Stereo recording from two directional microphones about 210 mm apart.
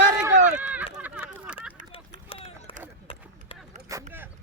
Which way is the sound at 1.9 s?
25° left (ahead or behind).